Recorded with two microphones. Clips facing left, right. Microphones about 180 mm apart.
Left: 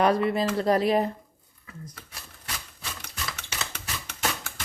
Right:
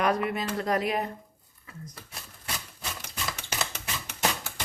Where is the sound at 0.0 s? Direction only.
30° left (ahead or behind).